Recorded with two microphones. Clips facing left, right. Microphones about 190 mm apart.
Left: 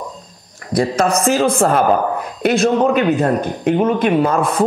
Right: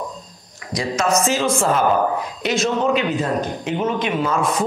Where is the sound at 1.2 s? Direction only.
55° left (ahead or behind).